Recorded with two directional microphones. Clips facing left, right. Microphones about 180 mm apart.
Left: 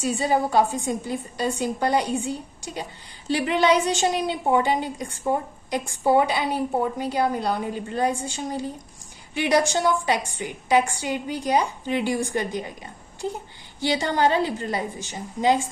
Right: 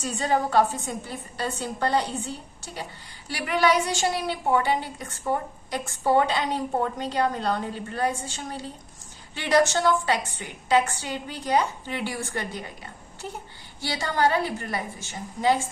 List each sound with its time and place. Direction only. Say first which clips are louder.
0.0 s a woman's voice: left 3 dB; 10° left (ahead or behind)